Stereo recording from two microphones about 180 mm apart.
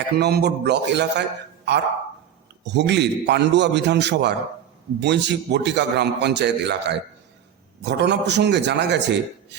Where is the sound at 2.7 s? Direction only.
75° right (ahead or behind).